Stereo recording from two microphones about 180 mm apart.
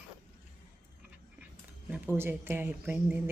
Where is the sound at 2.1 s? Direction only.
10° right (ahead or behind).